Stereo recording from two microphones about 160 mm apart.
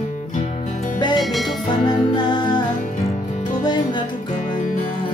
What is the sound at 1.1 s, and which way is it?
Music, centre (ahead or behind).